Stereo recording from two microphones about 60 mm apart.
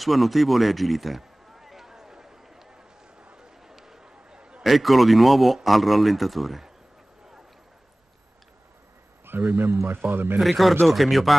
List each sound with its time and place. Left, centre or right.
0.0 s a sound: centre
4.6 s speech: centre
9.2 s a man's voice: right
10.4 s speech: centre